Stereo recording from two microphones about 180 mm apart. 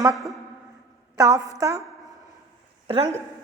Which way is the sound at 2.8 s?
30° right (ahead or behind).